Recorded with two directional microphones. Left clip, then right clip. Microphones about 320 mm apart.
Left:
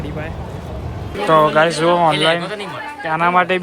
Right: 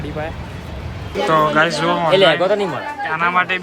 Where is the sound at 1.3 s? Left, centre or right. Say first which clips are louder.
Left 2 dB; centre.